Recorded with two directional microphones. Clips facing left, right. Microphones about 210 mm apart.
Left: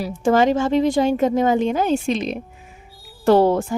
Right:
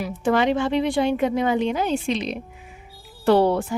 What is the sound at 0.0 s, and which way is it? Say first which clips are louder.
A woman's voice: left 4 dB; 40° left (ahead or behind).